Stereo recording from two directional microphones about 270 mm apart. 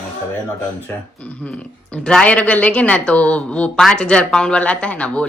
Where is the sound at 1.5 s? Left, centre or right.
Centre.